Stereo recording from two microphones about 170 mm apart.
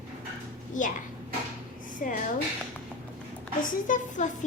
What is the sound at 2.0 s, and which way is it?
Speech, 50° left (ahead or behind).